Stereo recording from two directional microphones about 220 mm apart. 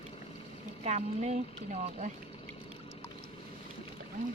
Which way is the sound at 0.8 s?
30° right (ahead or behind).